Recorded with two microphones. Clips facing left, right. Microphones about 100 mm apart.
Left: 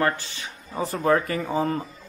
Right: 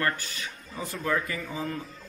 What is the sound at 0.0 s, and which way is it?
Speech, 25° left (ahead or behind).